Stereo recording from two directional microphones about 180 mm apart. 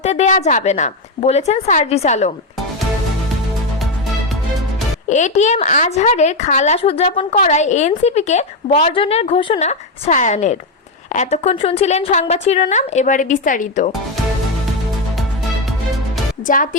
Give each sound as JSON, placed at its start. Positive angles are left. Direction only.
{"t": 0.0, "sound": "speech", "side_deg": 40}
{"t": 5.0, "sound": "speech", "side_deg": 40}